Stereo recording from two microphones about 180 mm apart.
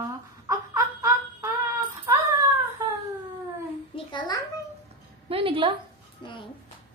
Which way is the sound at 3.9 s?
25° left (ahead or behind).